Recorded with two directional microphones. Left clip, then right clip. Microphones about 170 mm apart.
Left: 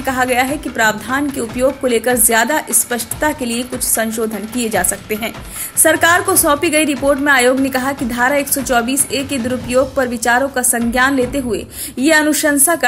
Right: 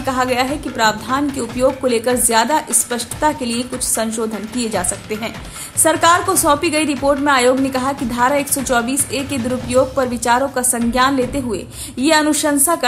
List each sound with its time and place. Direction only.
0.0 s a woman's voice: 10° left (ahead or behind)